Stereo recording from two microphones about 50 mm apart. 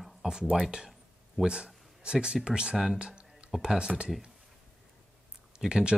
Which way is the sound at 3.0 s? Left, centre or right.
Centre.